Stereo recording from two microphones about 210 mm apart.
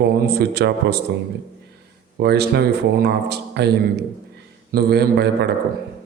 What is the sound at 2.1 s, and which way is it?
A man's voice, 50° right (ahead or behind).